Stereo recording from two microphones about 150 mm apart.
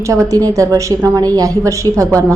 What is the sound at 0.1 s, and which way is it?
A woman's voice, 20° right (ahead or behind).